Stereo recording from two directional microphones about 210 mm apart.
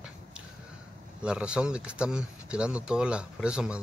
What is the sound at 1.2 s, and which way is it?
Speech, 5° right (ahead or behind).